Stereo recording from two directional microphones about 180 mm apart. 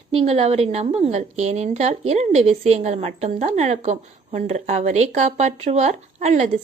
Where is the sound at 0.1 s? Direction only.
35° right (ahead or behind).